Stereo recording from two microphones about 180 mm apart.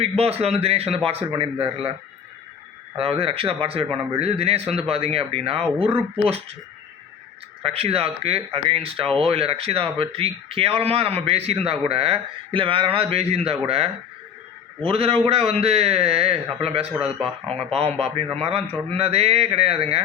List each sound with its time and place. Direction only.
0.0 s speech: 35° right (ahead or behind)
3.0 s speech: 30° right (ahead or behind)
7.6 s speech: 35° right (ahead or behind)
16.9 s speech: 5° right (ahead or behind)
17.7 s speech: 35° right (ahead or behind)